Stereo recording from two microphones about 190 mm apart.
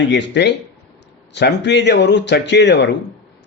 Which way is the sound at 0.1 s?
65° left (ahead or behind).